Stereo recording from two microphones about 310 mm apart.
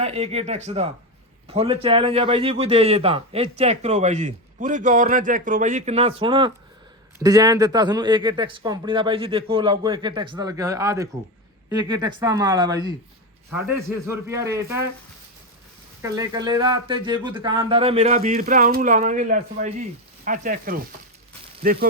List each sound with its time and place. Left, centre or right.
0.0 s a man's voice: right
14.1 s a man's voice: centre
16.0 s a man's voice: centre; by 21.8 s right